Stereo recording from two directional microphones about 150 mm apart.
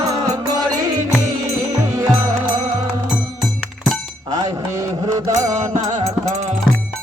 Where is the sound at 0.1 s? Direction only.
25° right (ahead or behind).